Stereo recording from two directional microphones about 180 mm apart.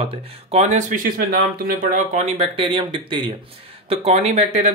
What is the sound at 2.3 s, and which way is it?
Speech, 30° right (ahead or behind).